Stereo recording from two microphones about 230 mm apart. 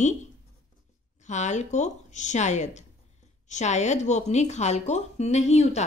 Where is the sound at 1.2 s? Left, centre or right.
Left.